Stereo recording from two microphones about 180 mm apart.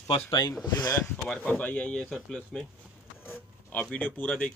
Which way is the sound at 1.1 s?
10° left (ahead or behind).